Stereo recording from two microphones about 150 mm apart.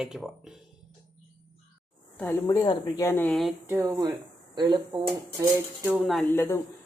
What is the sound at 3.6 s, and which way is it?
Speech, 20° right (ahead or behind).